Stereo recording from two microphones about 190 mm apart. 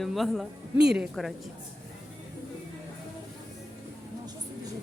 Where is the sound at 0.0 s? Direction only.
Centre (ahead or behind).